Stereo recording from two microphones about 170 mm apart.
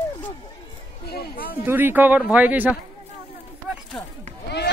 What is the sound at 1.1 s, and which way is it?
Speech, 60° left (ahead or behind).